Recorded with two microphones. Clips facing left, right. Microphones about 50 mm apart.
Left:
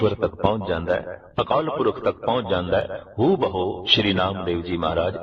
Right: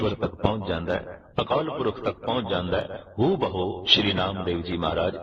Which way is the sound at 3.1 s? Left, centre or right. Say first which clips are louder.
Left 4 dB; centre.